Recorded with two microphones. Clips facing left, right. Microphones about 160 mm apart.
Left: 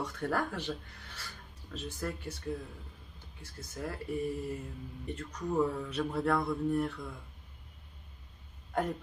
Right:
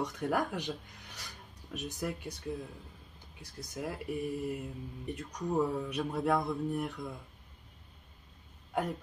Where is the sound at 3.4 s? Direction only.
15° right (ahead or behind).